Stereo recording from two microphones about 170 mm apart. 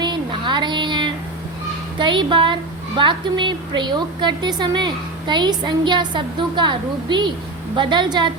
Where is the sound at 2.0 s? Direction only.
30° right (ahead or behind).